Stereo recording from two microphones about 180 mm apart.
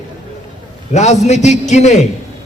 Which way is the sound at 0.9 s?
40° left (ahead or behind).